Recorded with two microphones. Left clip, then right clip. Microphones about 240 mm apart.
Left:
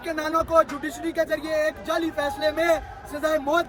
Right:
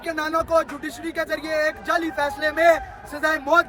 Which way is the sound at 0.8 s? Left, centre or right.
Centre.